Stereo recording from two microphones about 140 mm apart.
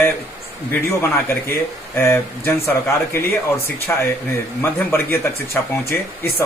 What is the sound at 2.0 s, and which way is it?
Speech, 20° left (ahead or behind).